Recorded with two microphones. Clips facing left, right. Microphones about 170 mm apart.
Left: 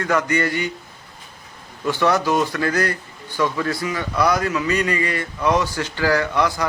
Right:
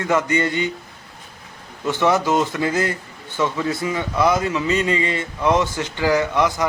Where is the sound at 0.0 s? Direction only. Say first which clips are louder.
Right 1 dB; 20° right (ahead or behind).